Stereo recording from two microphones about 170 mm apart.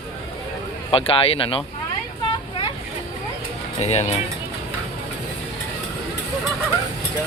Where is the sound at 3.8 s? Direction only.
40° left (ahead or behind).